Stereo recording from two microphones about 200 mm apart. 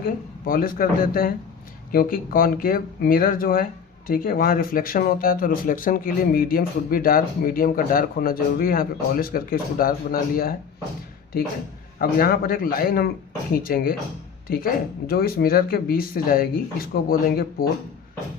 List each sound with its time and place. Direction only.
0.0 s speech: 45° left (ahead or behind)
11.9 s speech: 50° left (ahead or behind)